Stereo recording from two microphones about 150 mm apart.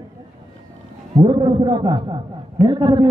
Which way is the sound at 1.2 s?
30° right (ahead or behind).